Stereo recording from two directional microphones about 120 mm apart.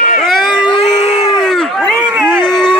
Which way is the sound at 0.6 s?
50° left (ahead or behind).